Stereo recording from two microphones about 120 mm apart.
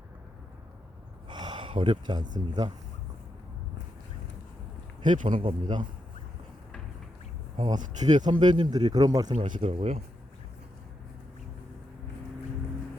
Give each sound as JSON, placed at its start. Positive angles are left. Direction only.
{"t": 1.3, "sound": "speech", "side_deg": -40}
{"t": 5.0, "sound": "speech", "side_deg": -90}
{"t": 5.4, "sound": "speech", "side_deg": -45}
{"t": 7.8, "sound": "speech", "side_deg": -90}
{"t": 8.2, "sound": "speech", "side_deg": -35}
{"t": 9.3, "sound": "speech", "side_deg": -55}